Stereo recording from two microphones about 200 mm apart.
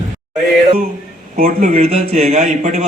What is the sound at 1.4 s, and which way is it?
A man's voice, 40° right (ahead or behind).